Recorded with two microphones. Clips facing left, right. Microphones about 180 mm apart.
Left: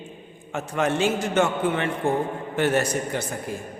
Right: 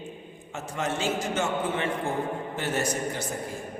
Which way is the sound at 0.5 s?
65° left (ahead or behind).